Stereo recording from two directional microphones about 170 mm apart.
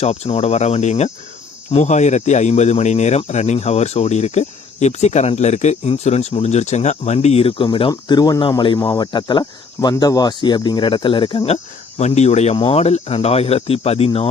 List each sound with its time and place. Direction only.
0.0 s speech: 40° left (ahead or behind)